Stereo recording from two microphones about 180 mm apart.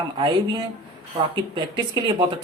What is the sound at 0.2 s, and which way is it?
Speech, 25° right (ahead or behind).